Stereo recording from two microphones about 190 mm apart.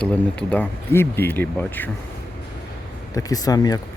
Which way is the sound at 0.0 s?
5° left (ahead or behind).